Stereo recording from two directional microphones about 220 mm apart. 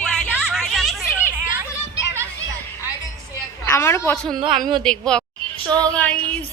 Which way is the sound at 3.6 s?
10° left (ahead or behind).